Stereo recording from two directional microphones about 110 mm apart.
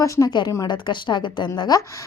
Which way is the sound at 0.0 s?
30° left (ahead or behind).